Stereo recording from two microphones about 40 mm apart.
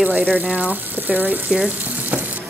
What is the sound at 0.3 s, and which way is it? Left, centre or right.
Speech, right.